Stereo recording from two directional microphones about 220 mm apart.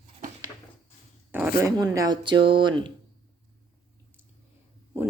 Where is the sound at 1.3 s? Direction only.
10° right (ahead or behind).